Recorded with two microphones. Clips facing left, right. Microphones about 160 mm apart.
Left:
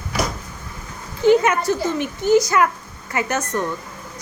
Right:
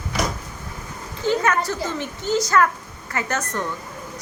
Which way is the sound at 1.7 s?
15° left (ahead or behind).